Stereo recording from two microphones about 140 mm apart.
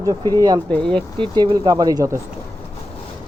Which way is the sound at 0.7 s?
5° left (ahead or behind).